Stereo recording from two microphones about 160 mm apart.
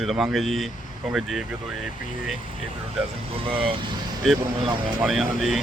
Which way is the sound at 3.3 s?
35° right (ahead or behind).